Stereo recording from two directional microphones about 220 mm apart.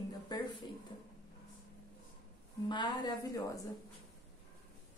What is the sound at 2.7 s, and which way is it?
Speech, 20° left (ahead or behind).